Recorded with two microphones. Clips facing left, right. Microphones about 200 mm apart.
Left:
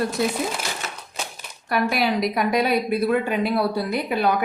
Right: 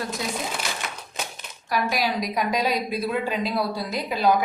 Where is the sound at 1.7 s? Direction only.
60° left (ahead or behind).